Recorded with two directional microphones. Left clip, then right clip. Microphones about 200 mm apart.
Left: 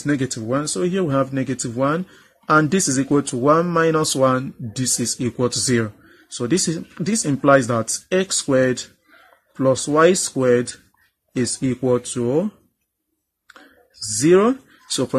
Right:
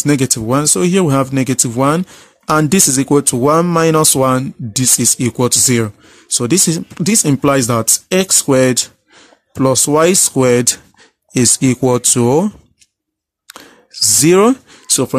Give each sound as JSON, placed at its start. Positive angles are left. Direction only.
{"t": 0.0, "sound": "speech", "side_deg": -40}
{"t": 14.2, "sound": "speech", "side_deg": -40}